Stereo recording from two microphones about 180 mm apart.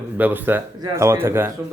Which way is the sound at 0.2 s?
10° right (ahead or behind).